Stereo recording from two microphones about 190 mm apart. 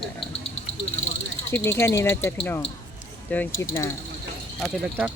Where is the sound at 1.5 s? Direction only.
10° left (ahead or behind).